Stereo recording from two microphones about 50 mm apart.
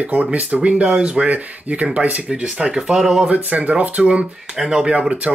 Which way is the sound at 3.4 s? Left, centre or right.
Right.